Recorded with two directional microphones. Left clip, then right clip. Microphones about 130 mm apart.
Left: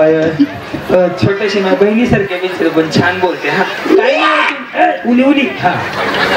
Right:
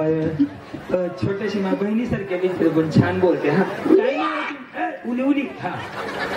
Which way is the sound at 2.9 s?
15° left (ahead or behind).